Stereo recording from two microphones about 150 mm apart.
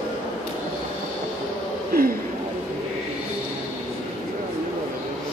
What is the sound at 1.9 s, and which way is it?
Speech, 90° right.